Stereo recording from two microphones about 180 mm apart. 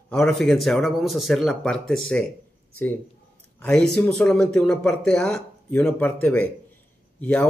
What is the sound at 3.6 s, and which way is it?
Speech, 5° left (ahead or behind).